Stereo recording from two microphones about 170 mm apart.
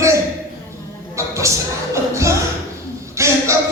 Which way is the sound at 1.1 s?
15° right (ahead or behind).